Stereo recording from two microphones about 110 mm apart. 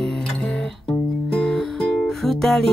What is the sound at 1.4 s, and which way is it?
Music, 5° left (ahead or behind).